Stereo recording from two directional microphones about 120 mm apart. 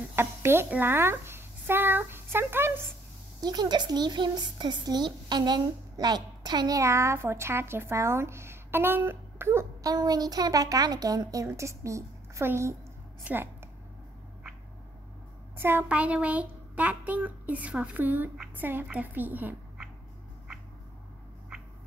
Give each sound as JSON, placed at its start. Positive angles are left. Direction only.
{"t": 0.1, "sound": "speech", "side_deg": -20}
{"t": 3.3, "sound": "speech", "side_deg": -35}
{"t": 9.9, "sound": "a woman's voice", "side_deg": -35}
{"t": 15.5, "sound": "a child's voice", "side_deg": -20}